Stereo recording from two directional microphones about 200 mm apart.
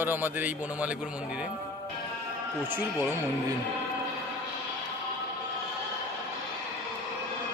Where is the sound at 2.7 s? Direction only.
10° right (ahead or behind).